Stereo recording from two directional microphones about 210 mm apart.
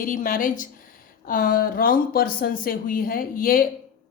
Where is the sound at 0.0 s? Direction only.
40° left (ahead or behind).